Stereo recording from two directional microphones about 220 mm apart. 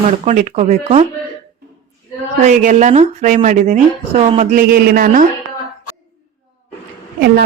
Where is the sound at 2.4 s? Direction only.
35° right (ahead or behind).